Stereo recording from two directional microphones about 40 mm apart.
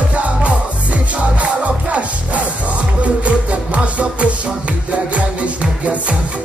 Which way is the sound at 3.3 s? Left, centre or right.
Right.